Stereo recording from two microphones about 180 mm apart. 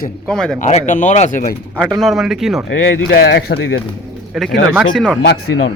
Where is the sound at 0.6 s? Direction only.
40° left (ahead or behind).